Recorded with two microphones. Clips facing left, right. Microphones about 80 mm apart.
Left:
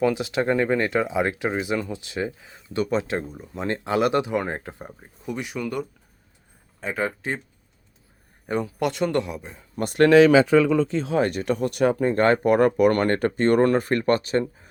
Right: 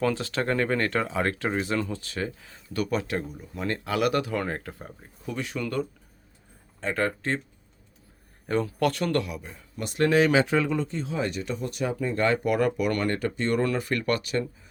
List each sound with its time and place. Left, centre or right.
0.0 s speech: centre
8.4 s speech: centre
9.7 s speech: left
10.0 s speech: left
11.2 s speech: left